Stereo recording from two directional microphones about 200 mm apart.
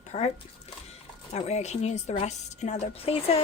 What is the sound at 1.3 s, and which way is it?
A woman's voice, 35° left (ahead or behind).